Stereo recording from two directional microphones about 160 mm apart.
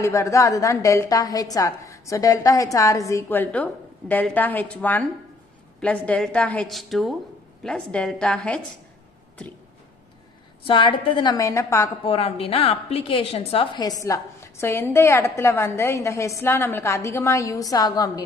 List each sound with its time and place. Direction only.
0.0 s a woman's voice: 20° left (ahead or behind)
10.6 s a woman's voice: 30° left (ahead or behind)
12.0 s a woman's voice: 35° left (ahead or behind)